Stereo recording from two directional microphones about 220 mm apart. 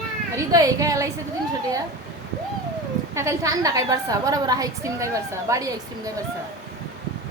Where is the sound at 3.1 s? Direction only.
15° right (ahead or behind).